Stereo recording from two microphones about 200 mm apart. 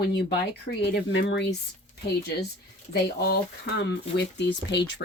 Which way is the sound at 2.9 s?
50° left (ahead or behind).